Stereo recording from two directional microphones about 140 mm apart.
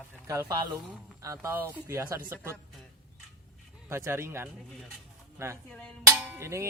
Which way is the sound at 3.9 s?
20° right (ahead or behind).